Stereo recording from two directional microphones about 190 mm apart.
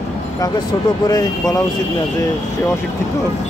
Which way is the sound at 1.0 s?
20° left (ahead or behind).